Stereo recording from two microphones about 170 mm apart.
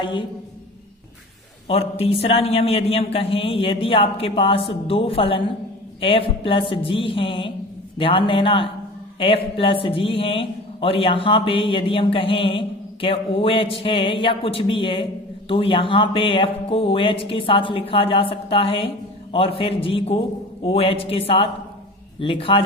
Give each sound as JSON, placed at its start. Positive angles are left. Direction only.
{"t": 0.0, "sound": "a man's voice", "side_deg": 30}
{"t": 1.6, "sound": "a man's voice", "side_deg": 35}